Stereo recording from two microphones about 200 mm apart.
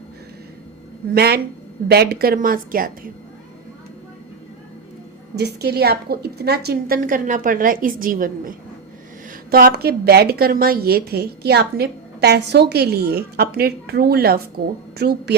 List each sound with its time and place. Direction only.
1.1 s a woman's voice: 55° right (ahead or behind)
5.4 s a woman's voice: 55° right (ahead or behind)